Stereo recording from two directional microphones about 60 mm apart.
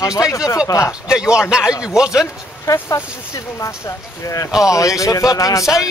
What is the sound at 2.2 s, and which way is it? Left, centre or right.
Speech, left.